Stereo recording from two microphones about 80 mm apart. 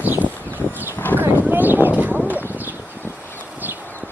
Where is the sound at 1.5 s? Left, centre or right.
Right.